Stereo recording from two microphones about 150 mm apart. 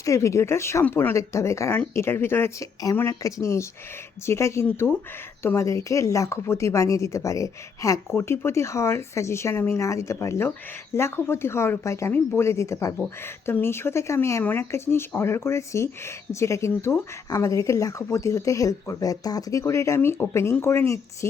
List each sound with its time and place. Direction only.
0.0 s speech: 20° left (ahead or behind)